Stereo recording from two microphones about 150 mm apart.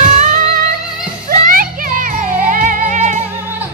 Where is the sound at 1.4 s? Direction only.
65° right (ahead or behind).